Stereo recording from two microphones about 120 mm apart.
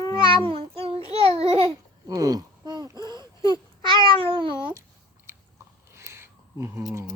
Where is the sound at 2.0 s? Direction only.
30° right (ahead or behind).